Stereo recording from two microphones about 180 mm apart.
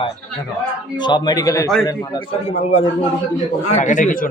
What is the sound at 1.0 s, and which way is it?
Speech, 25° left (ahead or behind).